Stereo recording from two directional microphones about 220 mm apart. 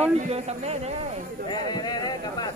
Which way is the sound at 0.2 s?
30° right (ahead or behind).